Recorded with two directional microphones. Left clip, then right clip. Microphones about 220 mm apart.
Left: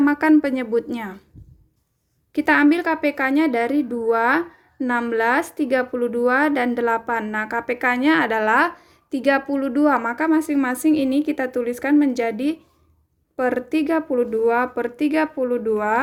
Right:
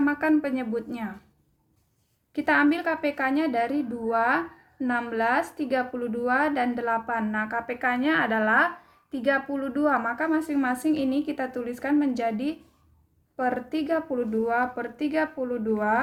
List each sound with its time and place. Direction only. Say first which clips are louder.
0.0 s a woman's voice: left 7 dB; 35° left (ahead or behind)
2.3 s a woman's voice: left 6 dB; 35° left (ahead or behind)